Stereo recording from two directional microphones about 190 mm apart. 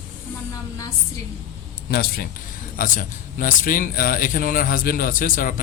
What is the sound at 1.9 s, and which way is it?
A man's voice, 55° left (ahead or behind).